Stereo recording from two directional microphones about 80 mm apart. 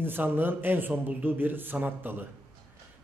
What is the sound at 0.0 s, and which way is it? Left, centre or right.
A man's voice, right.